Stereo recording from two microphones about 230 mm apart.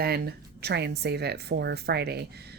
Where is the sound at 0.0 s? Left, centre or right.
Right.